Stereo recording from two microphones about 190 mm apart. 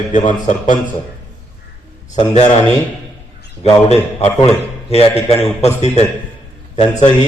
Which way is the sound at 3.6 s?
35° left (ahead or behind).